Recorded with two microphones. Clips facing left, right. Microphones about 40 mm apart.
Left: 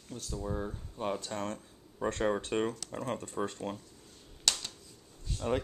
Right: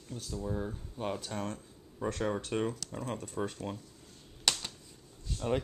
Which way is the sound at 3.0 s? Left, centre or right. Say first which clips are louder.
Left 2 dB; centre.